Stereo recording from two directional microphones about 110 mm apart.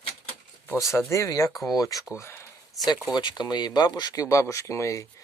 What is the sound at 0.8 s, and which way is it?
Speech, 30° left (ahead or behind).